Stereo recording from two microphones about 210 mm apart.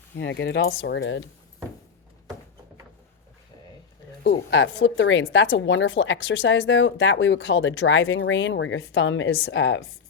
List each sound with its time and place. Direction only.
0.2 s a woman's voice: 55° left (ahead or behind)
4.2 s speech: 45° left (ahead or behind)
4.6 s a woman's voice: 65° left (ahead or behind)